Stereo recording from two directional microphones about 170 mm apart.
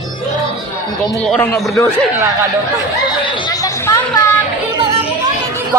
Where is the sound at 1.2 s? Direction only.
5° left (ahead or behind).